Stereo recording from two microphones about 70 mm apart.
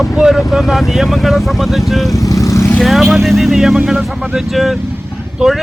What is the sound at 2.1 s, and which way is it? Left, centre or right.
Vehicle, left.